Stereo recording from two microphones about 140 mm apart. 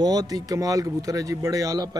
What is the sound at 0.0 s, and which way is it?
Speech, 30° right (ahead or behind).